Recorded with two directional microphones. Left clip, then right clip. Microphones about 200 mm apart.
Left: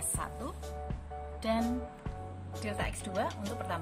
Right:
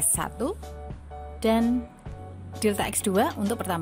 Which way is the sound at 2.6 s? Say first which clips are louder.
Right 12 dB; 55° right (ahead or behind).